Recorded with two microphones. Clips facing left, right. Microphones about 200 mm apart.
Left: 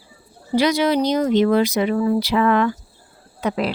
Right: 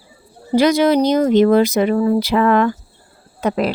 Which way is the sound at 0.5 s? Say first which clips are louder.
Right 4 dB; 45° right (ahead or behind).